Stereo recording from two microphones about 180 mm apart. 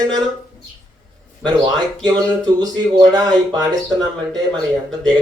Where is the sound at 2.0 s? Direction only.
20° right (ahead or behind).